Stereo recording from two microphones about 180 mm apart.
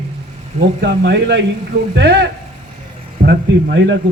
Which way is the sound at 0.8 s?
70° right (ahead or behind).